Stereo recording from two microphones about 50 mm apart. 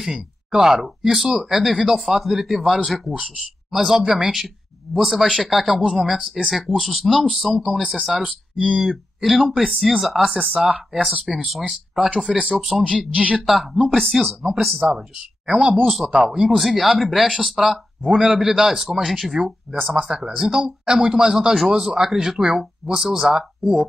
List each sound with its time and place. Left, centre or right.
0.5 s speech: centre
13.1 s a woman's voice: right
13.8 s speech: centre
15.0 s speech: centre